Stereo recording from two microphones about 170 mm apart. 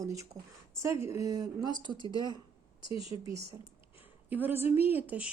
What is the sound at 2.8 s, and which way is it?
Speech, 30° left (ahead or behind).